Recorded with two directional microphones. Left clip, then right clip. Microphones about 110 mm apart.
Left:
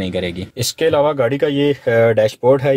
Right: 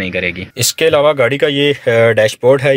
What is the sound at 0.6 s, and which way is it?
Speech, centre (ahead or behind).